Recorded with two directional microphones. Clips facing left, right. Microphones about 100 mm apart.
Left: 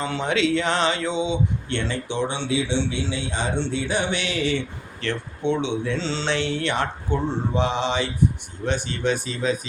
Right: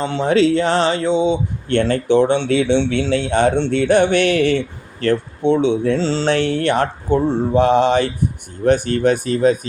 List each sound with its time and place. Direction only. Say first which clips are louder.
0.0 s speech: right 8 dB; 30° right (ahead or behind)
1.7 s speech: right 17 dB; 50° right (ahead or behind)